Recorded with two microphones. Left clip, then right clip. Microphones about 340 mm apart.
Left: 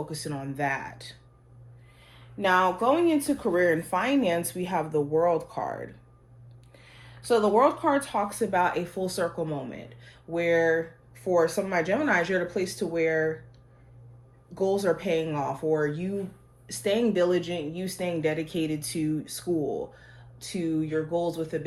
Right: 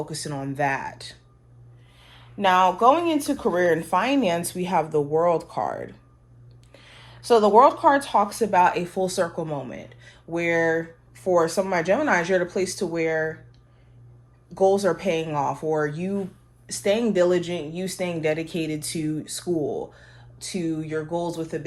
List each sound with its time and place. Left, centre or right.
0.1 s speech: right
14.5 s speech: right